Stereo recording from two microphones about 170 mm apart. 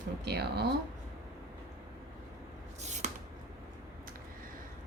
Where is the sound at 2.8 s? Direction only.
40° right (ahead or behind).